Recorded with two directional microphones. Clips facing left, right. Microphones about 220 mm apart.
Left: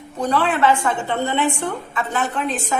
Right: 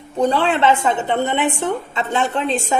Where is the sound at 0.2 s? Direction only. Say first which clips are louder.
Right 2 dB; 25° right (ahead or behind).